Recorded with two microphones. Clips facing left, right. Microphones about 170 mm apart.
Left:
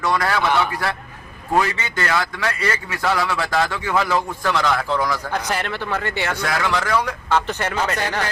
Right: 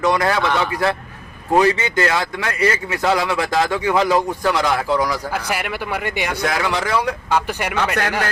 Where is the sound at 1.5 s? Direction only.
20° right (ahead or behind).